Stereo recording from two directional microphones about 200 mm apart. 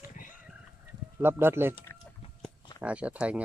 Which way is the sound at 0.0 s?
45° left (ahead or behind).